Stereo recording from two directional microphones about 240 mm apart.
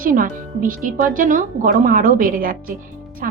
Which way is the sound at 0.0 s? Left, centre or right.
Right.